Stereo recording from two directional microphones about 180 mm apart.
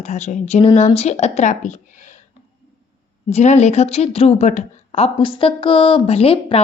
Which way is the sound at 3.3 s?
40° left (ahead or behind).